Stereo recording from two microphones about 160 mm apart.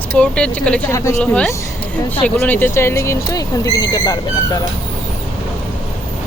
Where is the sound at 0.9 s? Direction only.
20° left (ahead or behind).